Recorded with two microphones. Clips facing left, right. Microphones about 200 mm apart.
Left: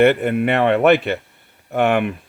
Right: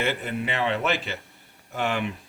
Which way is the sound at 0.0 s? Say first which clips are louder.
Left 13 dB; 60° left (ahead or behind).